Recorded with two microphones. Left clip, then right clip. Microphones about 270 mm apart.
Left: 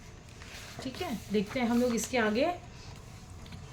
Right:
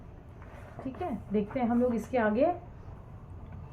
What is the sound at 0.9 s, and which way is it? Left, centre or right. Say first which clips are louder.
A woman's voice: even; left.